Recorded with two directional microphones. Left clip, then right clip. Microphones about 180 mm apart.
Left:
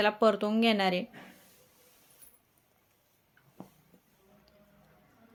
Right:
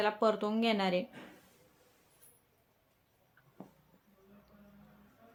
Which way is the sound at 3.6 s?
70° left (ahead or behind).